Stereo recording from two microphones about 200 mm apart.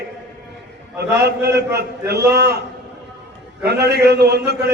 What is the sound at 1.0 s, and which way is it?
A man's voice, 55° right (ahead or behind).